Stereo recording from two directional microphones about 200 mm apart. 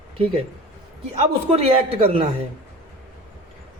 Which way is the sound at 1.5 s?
30° right (ahead or behind).